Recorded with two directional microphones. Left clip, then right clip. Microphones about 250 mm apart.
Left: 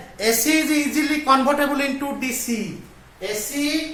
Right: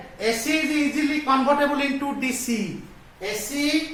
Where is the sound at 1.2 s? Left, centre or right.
Left.